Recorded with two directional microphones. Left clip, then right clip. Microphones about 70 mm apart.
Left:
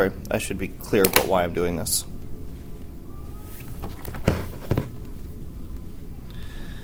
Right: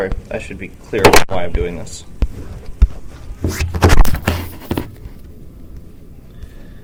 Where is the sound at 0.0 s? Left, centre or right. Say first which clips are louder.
Right 1 dB; left.